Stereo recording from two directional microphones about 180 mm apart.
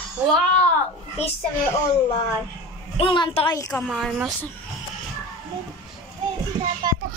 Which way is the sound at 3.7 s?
Centre (ahead or behind).